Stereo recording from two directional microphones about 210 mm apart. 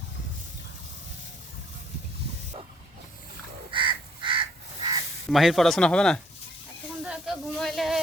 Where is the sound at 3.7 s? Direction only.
25° right (ahead or behind).